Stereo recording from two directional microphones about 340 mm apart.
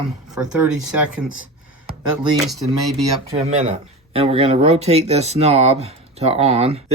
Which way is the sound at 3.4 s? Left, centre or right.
Centre.